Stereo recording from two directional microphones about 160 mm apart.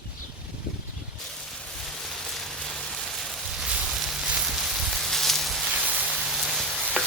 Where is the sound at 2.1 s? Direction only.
5° left (ahead or behind).